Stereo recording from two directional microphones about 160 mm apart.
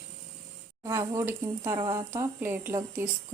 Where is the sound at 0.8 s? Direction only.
15° right (ahead or behind).